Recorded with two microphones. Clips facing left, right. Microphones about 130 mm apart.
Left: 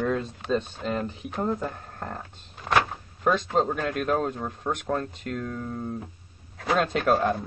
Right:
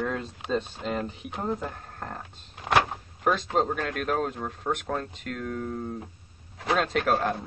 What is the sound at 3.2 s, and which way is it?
Speech, centre (ahead or behind).